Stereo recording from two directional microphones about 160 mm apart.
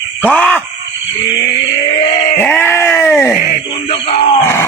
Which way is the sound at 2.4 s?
15° left (ahead or behind).